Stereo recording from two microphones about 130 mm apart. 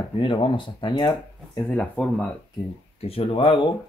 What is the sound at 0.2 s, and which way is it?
Speech, 40° left (ahead or behind).